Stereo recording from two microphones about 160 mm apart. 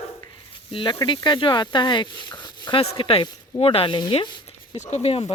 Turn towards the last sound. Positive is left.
turn(degrees=40)  # may be behind; listen again after turning